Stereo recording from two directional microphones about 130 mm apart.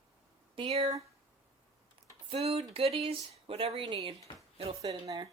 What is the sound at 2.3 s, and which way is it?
Speech, 50° right (ahead or behind).